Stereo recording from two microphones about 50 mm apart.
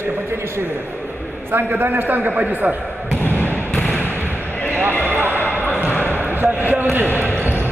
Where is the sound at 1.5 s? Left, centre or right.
Right.